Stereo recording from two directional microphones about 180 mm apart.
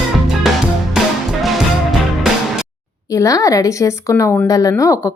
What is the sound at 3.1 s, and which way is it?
A woman's voice, 20° left (ahead or behind).